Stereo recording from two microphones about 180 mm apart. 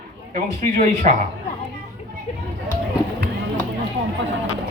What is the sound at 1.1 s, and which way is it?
Speech, 40° right (ahead or behind).